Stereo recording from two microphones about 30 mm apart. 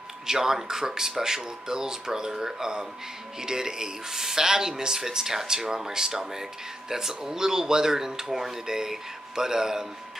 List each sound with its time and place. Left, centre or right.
0.3 s speech: centre